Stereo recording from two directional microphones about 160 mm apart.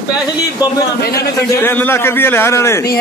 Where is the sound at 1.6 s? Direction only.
15° left (ahead or behind).